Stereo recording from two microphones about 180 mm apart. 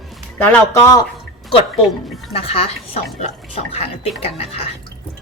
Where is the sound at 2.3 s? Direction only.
35° left (ahead or behind).